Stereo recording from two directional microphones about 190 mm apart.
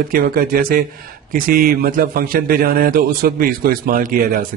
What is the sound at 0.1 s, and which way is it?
A man's voice, 50° right (ahead or behind).